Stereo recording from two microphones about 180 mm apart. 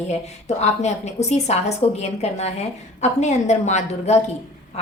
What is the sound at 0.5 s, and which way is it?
A woman's voice, 40° left (ahead or behind).